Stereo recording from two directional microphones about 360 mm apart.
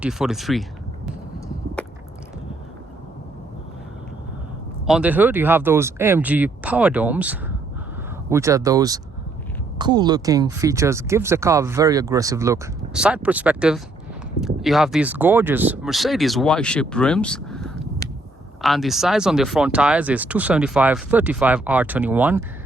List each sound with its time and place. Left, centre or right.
0.0 s speech: centre
4.9 s speech: centre